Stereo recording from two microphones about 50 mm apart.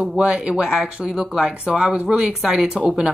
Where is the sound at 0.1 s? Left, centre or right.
Centre.